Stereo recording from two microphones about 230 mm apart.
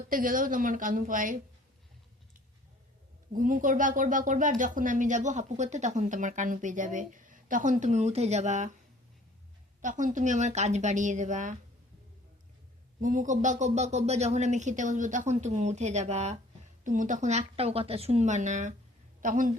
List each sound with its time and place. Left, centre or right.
0.1 s speech: right
3.3 s speech: right
9.8 s speech: right
13.0 s speech: right